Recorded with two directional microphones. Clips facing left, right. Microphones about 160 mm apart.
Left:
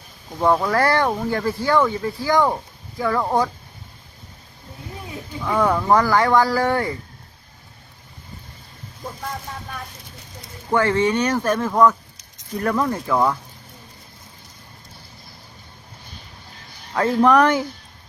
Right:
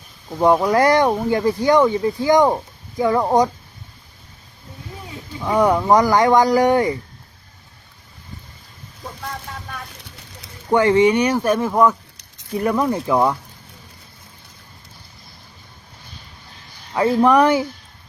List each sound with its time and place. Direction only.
0.3 s speech: 15° right (ahead or behind)
5.4 s speech: 15° right (ahead or behind)
10.7 s speech: 15° right (ahead or behind)
16.9 s speech: 10° right (ahead or behind)